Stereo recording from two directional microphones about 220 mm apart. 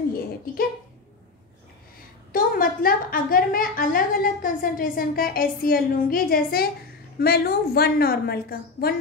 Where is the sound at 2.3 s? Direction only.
40° left (ahead or behind).